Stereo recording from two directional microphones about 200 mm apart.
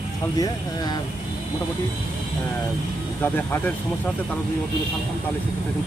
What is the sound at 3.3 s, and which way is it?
Speech, 10° left (ahead or behind).